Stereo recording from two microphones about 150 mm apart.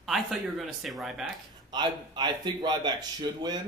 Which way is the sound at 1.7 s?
30° right (ahead or behind).